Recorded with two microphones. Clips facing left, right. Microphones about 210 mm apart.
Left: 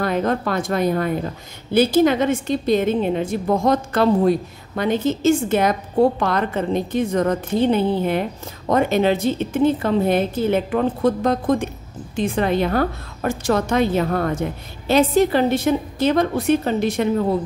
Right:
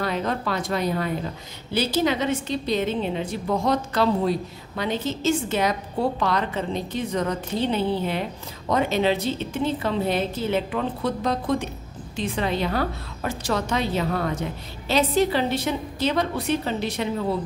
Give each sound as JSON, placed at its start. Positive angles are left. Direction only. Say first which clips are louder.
{"t": 0.0, "sound": "a woman's voice", "louder": "left 5 dB", "side_deg": 50}